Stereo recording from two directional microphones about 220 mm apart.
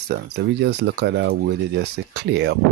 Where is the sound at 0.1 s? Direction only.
50° right (ahead or behind).